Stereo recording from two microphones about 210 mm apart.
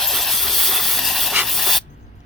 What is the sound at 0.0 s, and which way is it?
Steam, centre (ahead or behind).